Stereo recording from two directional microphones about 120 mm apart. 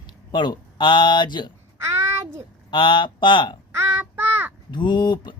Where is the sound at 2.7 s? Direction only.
45° left (ahead or behind).